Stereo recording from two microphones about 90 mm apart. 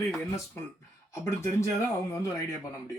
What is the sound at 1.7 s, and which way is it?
Speech, 35° left (ahead or behind).